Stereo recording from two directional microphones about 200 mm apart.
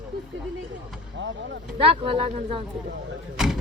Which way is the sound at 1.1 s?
65° right (ahead or behind).